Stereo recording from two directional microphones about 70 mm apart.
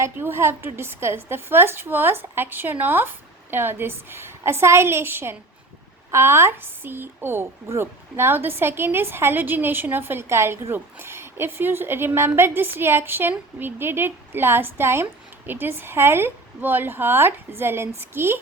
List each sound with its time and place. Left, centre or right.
0.0 s a woman's voice: right